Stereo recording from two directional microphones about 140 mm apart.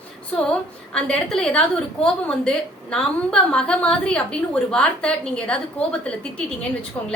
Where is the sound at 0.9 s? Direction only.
10° left (ahead or behind).